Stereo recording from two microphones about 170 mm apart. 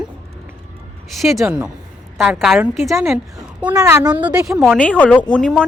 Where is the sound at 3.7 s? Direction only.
20° right (ahead or behind).